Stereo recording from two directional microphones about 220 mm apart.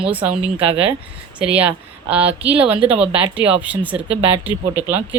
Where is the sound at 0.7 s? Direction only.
25° right (ahead or behind).